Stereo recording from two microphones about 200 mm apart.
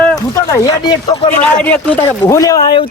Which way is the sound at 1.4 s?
10° left (ahead or behind).